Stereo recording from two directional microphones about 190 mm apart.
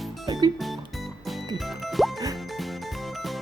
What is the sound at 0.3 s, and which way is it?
Music, 20° right (ahead or behind).